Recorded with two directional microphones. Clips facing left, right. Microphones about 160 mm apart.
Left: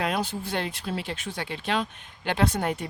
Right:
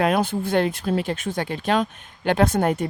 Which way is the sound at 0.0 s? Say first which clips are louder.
Right 7 dB; 55° right (ahead or behind).